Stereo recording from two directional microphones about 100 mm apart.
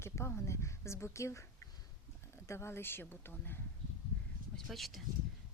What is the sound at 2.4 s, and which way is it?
A woman's voice, 25° left (ahead or behind).